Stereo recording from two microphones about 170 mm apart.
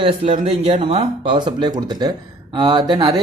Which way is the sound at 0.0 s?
30° right (ahead or behind).